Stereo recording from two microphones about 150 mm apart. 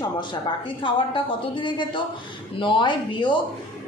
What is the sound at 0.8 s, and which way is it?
A woman's voice, 35° left (ahead or behind).